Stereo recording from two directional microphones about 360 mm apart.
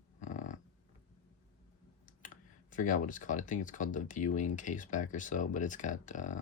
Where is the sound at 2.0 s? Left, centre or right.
Left.